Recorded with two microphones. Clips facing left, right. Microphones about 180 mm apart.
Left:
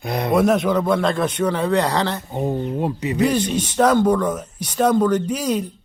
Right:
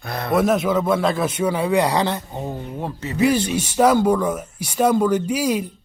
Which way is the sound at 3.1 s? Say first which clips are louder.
Right 2 dB; 10° right (ahead or behind).